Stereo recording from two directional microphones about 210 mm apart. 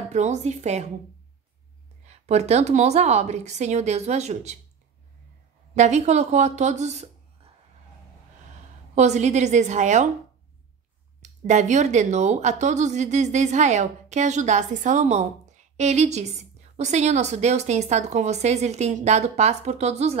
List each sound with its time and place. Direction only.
0.1 s speech: 35° right (ahead or behind)
2.0 s speech: 30° right (ahead or behind)
5.8 s speech: 35° right (ahead or behind)
8.9 s speech: 35° right (ahead or behind)
11.2 s speech: 35° right (ahead or behind)